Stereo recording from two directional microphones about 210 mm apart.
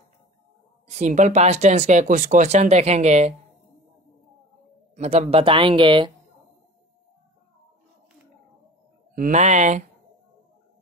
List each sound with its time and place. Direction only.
0.8 s speech: 35° right (ahead or behind)
4.9 s speech: 30° right (ahead or behind)
9.1 s speech: 40° right (ahead or behind)